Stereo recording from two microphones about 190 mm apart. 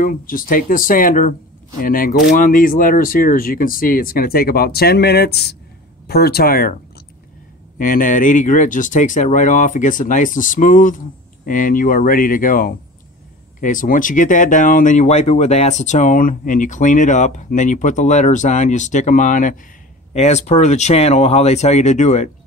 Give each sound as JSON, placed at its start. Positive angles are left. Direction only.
{"t": 0.0, "sound": "speech", "side_deg": 45}
{"t": 7.8, "sound": "speech", "side_deg": 45}